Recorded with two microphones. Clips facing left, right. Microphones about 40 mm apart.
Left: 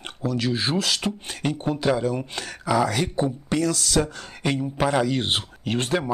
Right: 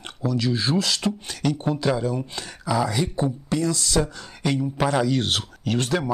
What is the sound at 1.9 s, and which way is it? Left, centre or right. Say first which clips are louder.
Speech: left 1 dB; left.